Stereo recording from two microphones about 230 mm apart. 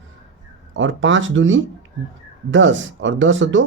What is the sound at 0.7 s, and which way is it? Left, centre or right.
Speech, right.